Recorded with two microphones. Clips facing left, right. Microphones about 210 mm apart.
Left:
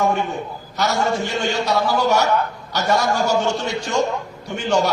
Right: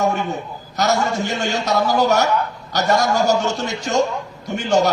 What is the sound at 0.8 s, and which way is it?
A man's voice, 45° right (ahead or behind).